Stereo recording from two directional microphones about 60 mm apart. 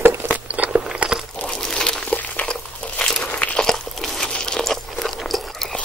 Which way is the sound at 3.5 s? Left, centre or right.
Centre.